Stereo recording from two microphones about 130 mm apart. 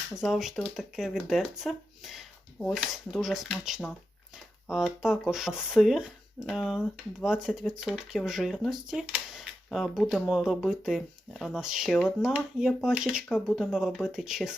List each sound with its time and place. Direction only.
0.2 s speech: centre (ahead or behind)